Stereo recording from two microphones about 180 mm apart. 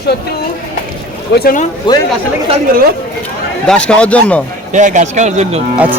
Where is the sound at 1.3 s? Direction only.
55° left (ahead or behind).